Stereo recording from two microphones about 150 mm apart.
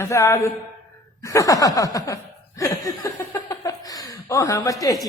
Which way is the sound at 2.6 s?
25° left (ahead or behind).